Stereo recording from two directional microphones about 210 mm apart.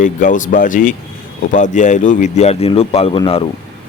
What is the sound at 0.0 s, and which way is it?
Speech, 35° left (ahead or behind).